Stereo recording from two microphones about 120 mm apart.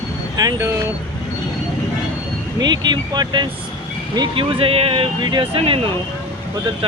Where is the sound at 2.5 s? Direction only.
35° right (ahead or behind).